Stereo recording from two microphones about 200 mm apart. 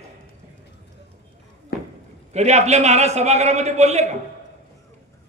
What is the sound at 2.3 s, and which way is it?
A man's voice, 35° right (ahead or behind).